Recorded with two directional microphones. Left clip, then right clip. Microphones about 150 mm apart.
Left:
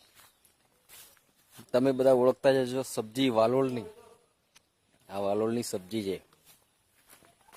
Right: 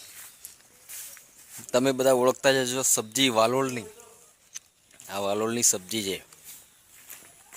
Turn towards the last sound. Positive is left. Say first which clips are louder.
# right 3 dB
turn(degrees=-5)  # may be behind; listen again after turning